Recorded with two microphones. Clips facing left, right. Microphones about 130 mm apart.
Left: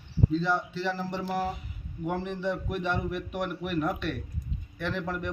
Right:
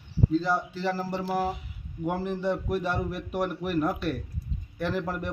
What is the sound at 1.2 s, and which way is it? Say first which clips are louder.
A man's voice: right 2 dB; 5° right (ahead or behind).